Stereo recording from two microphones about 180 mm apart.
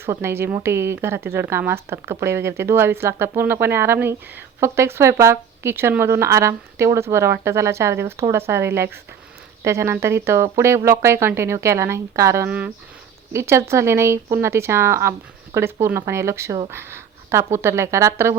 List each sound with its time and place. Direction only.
0.0 s speech: 15° right (ahead or behind)